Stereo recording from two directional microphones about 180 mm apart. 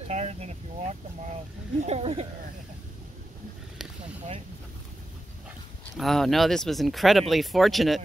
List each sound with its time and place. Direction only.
0.1 s speech: 40° right (ahead or behind)
5.9 s speech: centre (ahead or behind)